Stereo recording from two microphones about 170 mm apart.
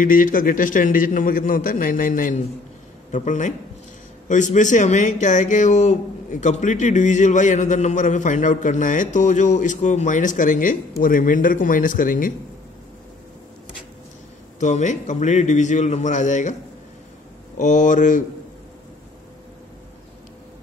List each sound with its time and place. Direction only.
0.0 s speech: 50° left (ahead or behind)
14.6 s speech: 45° left (ahead or behind)
17.6 s speech: 45° left (ahead or behind)